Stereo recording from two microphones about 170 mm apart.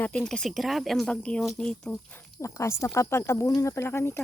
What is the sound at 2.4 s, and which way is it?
Speech, 15° left (ahead or behind).